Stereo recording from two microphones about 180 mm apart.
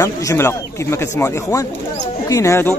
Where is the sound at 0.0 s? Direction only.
15° left (ahead or behind).